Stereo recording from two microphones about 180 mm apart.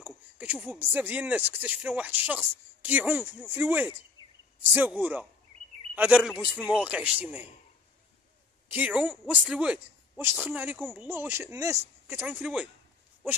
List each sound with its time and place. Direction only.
0.0 s a man's voice: 10° right (ahead or behind)
4.2 s a sound: 25° left (ahead or behind)
4.6 s a man's voice: 10° right (ahead or behind)
8.6 s a man's voice: 10° right (ahead or behind)